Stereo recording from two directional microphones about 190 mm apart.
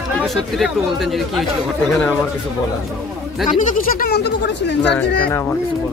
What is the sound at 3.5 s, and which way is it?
Speech, 40° left (ahead or behind).